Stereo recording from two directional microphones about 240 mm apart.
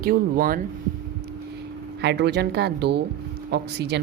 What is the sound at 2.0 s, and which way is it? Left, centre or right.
A woman's voice, right.